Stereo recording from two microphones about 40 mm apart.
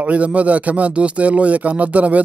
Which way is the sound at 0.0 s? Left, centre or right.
Right.